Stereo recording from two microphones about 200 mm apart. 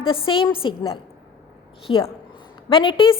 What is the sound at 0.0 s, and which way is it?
A woman's voice, 25° left (ahead or behind).